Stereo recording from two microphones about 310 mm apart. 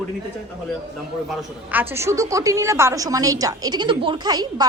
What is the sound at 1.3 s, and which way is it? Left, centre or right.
A woman's voice, centre.